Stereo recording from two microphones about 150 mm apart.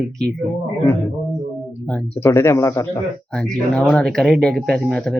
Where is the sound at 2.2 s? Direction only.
20° left (ahead or behind).